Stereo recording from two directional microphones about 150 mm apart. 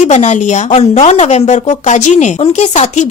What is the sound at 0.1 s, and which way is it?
A woman's voice, 50° left (ahead or behind).